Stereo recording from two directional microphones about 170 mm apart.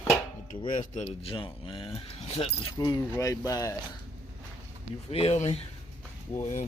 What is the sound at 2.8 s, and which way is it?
Speech, 20° left (ahead or behind).